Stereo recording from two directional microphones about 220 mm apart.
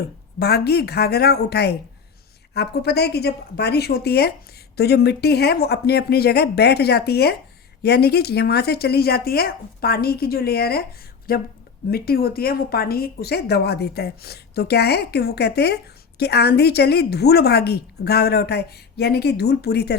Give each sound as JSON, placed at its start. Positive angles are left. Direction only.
{"t": 0.3, "sound": "speech", "side_deg": 45}